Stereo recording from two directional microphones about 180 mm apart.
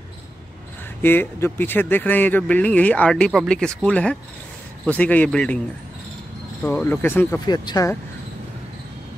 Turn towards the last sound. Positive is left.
turn(degrees=20)  # may be behind; listen again after turning